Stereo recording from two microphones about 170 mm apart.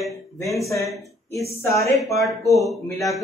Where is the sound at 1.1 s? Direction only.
20° left (ahead or behind).